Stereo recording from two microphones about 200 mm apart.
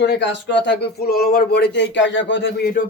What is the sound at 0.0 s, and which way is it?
Speech, 60° left (ahead or behind).